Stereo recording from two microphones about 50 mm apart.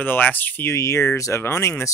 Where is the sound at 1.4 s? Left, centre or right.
Left.